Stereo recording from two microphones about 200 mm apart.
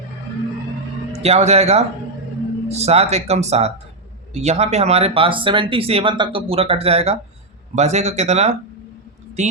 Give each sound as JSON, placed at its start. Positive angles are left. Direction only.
{"t": 1.1, "sound": "speech", "side_deg": -30}